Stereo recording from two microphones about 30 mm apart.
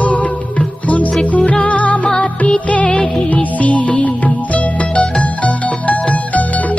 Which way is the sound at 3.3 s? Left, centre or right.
Left.